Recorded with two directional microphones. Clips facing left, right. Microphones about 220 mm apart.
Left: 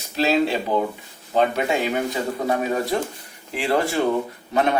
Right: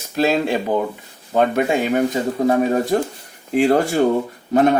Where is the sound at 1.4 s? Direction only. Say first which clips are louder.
Right 3 dB; 50° right (ahead or behind).